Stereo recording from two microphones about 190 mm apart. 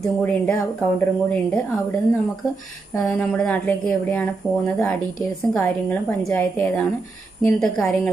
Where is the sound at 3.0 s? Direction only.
5° left (ahead or behind).